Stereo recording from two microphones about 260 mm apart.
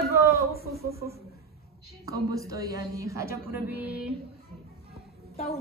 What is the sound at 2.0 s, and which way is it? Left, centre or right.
Speech, centre.